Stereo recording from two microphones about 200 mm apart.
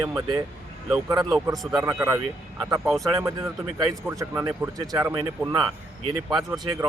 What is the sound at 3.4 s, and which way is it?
Speech, 15° right (ahead or behind).